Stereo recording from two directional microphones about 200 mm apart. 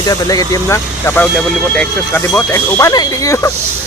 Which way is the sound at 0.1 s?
20° left (ahead or behind).